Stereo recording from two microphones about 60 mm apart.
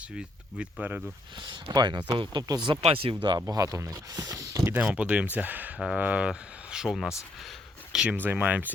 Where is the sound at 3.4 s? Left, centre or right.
Right.